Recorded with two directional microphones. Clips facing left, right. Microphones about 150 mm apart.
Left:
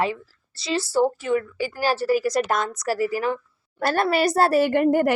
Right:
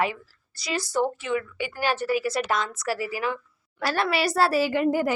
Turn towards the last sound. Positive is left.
turn(degrees=55)  # may be behind; listen again after turning